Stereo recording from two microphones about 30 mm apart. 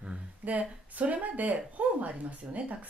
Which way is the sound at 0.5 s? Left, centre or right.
Right.